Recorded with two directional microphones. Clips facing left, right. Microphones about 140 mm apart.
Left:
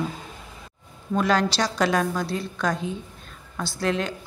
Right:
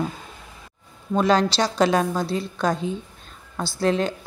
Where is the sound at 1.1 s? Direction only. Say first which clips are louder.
Right 3 dB; 25° right (ahead or behind).